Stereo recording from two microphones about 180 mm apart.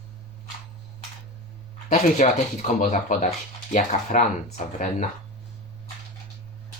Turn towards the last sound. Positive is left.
turn(degrees=45)  # may be behind; listen again after turning